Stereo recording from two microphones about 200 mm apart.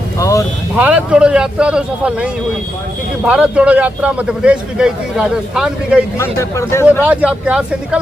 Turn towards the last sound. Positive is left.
turn(degrees=-5)  # may be behind; listen again after turning